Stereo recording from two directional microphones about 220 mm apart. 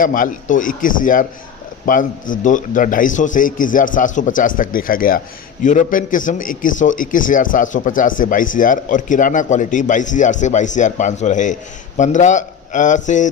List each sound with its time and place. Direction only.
0.0 s a man's voice: 40° left (ahead or behind)